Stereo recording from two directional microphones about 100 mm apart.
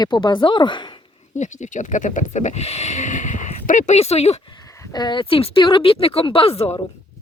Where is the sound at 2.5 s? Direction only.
90° left.